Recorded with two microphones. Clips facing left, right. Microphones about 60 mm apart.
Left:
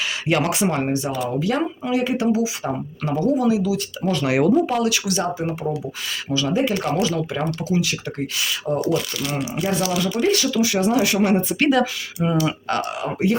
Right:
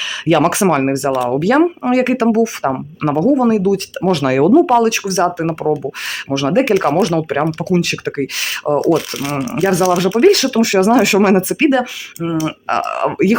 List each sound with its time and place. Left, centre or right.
0.4 s speech: right
3.3 s speech: right
4.1 s speech: right
6.3 s speech: right
6.6 s speech: right
7.0 s speech: right
9.6 s speech: right
10.2 s speech: right
11.6 s speech: right
12.2 s speech: centre
12.6 s speech: right
13.0 s speech: right